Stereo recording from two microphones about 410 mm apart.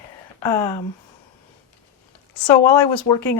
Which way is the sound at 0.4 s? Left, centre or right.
Centre.